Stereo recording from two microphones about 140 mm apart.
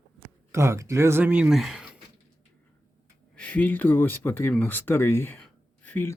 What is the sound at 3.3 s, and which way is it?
Speech, 10° left (ahead or behind).